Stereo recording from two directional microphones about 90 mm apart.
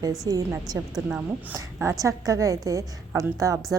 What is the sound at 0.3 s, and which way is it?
A woman's voice, 40° right (ahead or behind).